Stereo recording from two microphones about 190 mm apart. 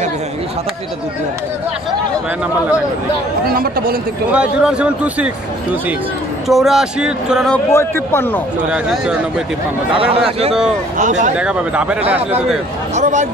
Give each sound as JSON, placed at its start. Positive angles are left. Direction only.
{"t": 3.4, "sound": "speech", "side_deg": -50}
{"t": 4.3, "sound": "a man's voice", "side_deg": -5}
{"t": 6.4, "sound": "a man's voice", "side_deg": 0}
{"t": 8.6, "sound": "a man's voice", "side_deg": -5}
{"t": 9.9, "sound": "speech", "side_deg": -30}
{"t": 11.3, "sound": "speech", "side_deg": -5}
{"t": 12.9, "sound": "speech", "side_deg": -40}